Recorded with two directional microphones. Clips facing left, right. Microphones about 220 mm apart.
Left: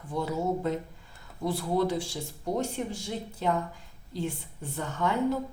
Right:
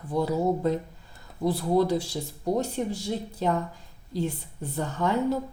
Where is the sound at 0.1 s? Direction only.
35° right (ahead or behind).